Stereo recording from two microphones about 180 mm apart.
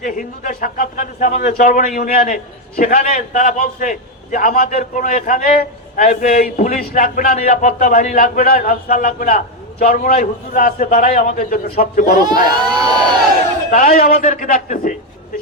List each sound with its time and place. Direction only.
0.0 s a man's voice: 50° left (ahead or behind)
11.3 s a man's voice: 55° left (ahead or behind)
12.5 s speech: 25° right (ahead or behind)
13.7 s a man's voice: 45° left (ahead or behind)